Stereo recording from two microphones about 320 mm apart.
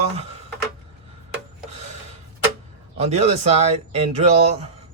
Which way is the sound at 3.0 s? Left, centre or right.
Centre.